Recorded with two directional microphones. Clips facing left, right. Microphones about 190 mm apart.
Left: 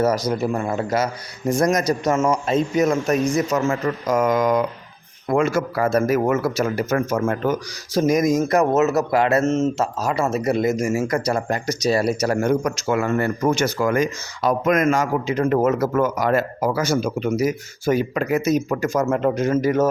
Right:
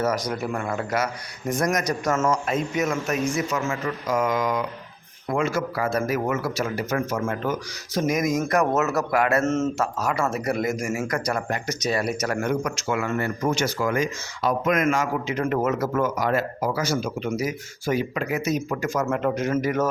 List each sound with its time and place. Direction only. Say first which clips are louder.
0.0 s speech: left 5 dB; 30° left (ahead or behind)
2.1 s a man's voice: left 1 dB; 15° left (ahead or behind)
2.5 s a man's voice: left 6 dB; 30° left (ahead or behind)